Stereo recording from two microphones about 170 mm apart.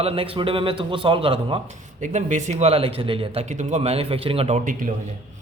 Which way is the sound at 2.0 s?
45° right (ahead or behind).